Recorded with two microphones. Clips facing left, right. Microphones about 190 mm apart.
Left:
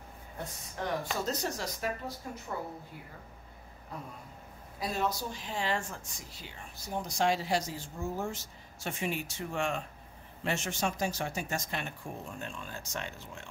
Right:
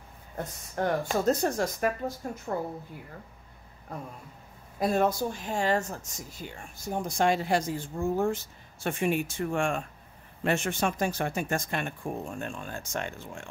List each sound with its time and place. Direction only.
0.7 s speech: 50° right (ahead or behind)
4.7 s speech: 50° right (ahead or behind)